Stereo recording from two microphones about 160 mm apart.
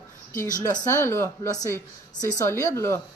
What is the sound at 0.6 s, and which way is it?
Speech, 15° left (ahead or behind).